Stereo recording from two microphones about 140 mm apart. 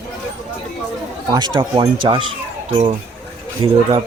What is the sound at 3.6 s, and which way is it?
Speech, 40° right (ahead or behind).